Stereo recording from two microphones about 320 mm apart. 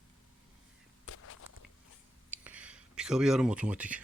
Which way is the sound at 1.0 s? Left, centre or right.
Left.